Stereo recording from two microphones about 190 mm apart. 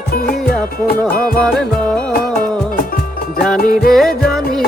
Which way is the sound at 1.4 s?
5° left (ahead or behind).